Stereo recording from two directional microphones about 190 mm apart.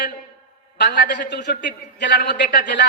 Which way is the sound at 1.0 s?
45° left (ahead or behind).